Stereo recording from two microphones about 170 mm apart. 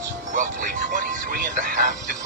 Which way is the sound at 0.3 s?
50° right (ahead or behind).